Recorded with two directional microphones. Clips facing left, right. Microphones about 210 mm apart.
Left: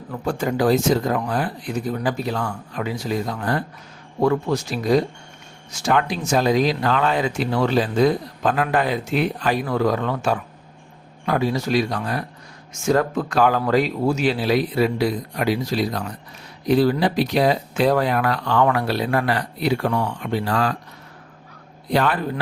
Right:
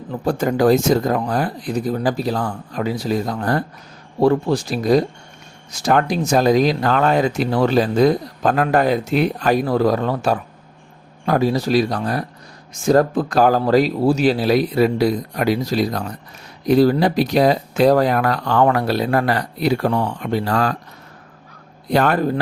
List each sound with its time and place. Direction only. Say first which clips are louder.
0.3 s speech: right 4 dB; 45° right (ahead or behind)
21.9 s a man's voice: right 3 dB; 45° right (ahead or behind)